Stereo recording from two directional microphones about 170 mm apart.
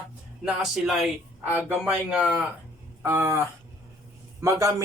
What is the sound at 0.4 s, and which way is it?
Speech, 5° right (ahead or behind).